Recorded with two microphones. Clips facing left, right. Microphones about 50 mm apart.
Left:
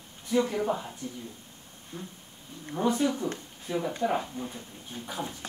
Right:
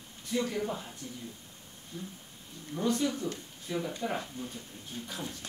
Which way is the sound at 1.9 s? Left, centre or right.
Left.